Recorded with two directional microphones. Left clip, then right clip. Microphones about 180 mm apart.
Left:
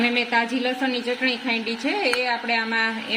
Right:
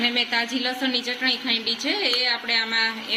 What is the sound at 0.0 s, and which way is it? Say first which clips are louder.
A woman's voice: left 1 dB; 45° left (ahead or behind).